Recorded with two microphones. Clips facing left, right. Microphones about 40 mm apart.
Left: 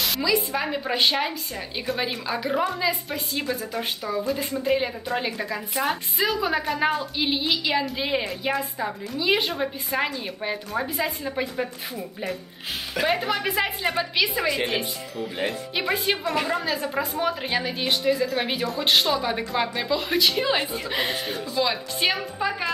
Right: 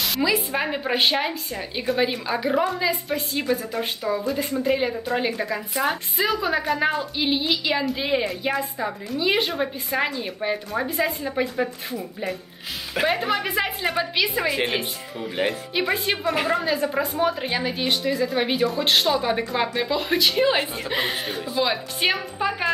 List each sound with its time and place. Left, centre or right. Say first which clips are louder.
0.2 s a woman's voice: right 3 dB; right; by 14.3 s centre
15.7 s a woman's voice: right 1 dB; centre